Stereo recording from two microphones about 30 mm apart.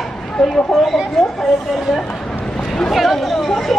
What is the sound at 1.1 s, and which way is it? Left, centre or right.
Speech, centre.